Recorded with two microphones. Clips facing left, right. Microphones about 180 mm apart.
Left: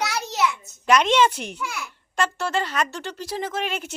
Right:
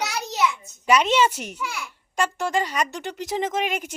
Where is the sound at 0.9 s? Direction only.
10° right (ahead or behind).